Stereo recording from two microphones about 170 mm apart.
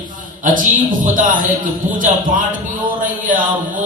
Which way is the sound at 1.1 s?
50° right (ahead or behind).